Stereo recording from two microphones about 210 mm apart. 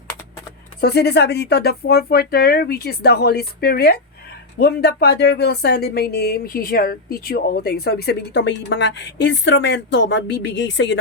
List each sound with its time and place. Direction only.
0.8 s speech: 50° left (ahead or behind)